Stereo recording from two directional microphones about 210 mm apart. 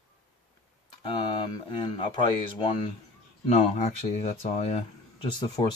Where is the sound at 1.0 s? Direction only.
20° left (ahead or behind).